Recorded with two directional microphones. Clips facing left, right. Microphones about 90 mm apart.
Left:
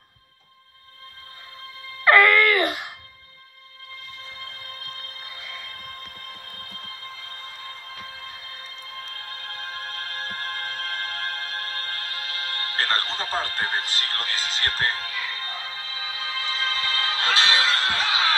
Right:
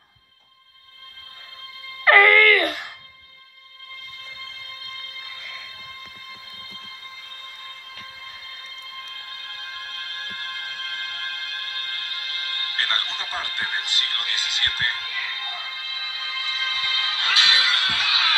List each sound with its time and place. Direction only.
2.0 s wail: 20° left (ahead or behind)
4.4 s music: 45° left (ahead or behind)
5.3 s music: 10° left (ahead or behind)
5.7 s music: 45° left (ahead or behind)